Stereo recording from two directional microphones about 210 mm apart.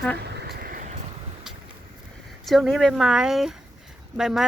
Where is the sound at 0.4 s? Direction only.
45° right (ahead or behind).